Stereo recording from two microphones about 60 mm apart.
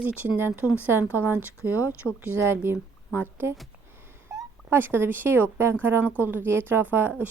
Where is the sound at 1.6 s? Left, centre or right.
Left.